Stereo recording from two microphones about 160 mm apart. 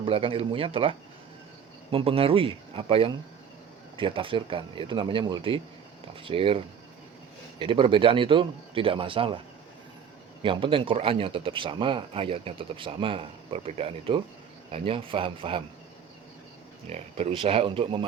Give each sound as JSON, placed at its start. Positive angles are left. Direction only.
{"t": 0.0, "sound": "a man's voice", "side_deg": -35}
{"t": 7.6, "sound": "a man's voice", "side_deg": -30}
{"t": 10.4, "sound": "a man's voice", "side_deg": -30}
{"t": 16.8, "sound": "a man's voice", "side_deg": -40}